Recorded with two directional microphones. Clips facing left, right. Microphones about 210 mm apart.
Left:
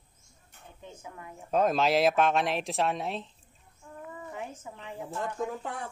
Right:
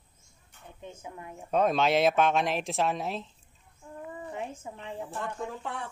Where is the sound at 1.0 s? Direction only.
25° right (ahead or behind).